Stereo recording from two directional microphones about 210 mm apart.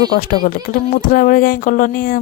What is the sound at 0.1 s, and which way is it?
Speech, 45° left (ahead or behind).